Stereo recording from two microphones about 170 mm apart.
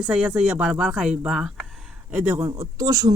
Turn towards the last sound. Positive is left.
turn(degrees=-20)  # may be behind; listen again after turning